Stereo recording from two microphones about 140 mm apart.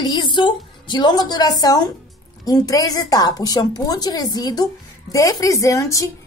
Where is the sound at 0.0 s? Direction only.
35° left (ahead or behind).